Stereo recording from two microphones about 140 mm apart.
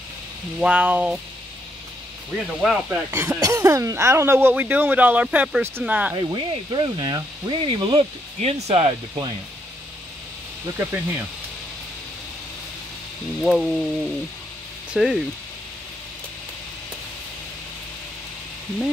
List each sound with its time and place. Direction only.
0.6 s speech: 10° right (ahead or behind)
2.3 s speech: 5° right (ahead or behind)
3.1 s speech: 20° right (ahead or behind)
6.1 s speech: 30° right (ahead or behind)
8.4 s speech: 50° right (ahead or behind)
10.8 s speech: 15° right (ahead or behind)
13.4 s speech: centre (ahead or behind)
14.9 s speech: centre (ahead or behind)